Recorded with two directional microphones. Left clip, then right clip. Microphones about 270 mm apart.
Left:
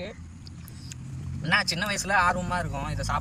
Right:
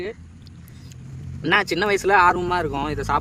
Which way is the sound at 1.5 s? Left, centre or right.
Right.